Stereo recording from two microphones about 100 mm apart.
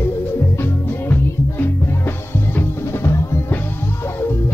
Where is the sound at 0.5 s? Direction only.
20° left (ahead or behind).